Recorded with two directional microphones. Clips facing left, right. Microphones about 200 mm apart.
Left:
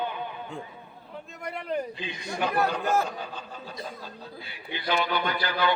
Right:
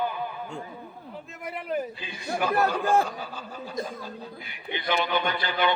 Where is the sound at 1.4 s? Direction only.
5° right (ahead or behind).